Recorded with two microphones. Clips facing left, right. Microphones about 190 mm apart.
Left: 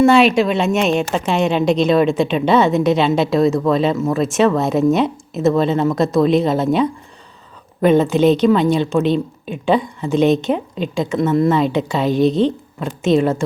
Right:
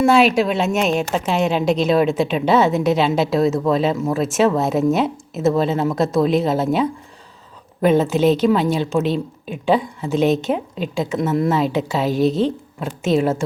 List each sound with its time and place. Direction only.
0.0 s a woman's voice: 5° right (ahead or behind)